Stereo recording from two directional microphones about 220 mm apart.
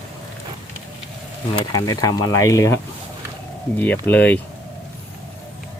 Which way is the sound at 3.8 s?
10° left (ahead or behind).